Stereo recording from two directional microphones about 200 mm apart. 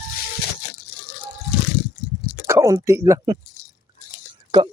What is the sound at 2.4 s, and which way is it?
Speech, 15° right (ahead or behind).